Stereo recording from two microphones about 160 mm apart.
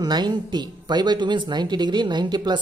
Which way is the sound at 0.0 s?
25° right (ahead or behind).